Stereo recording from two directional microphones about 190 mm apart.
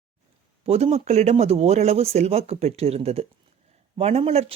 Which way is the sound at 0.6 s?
30° right (ahead or behind).